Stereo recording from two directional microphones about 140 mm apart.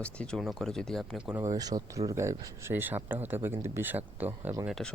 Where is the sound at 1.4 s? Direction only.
25° right (ahead or behind).